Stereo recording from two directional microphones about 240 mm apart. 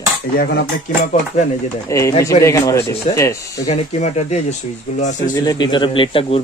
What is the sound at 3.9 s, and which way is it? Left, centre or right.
Speech, left.